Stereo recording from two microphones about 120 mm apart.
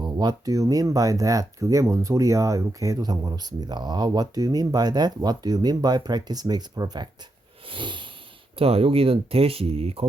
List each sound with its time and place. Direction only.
0.0 s speech: 35° right (ahead or behind)
7.7 s a sound: 40° right (ahead or behind)
8.5 s speech: 55° right (ahead or behind)